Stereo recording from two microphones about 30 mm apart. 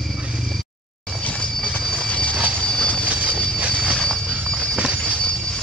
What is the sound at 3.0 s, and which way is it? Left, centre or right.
Vehicle, right.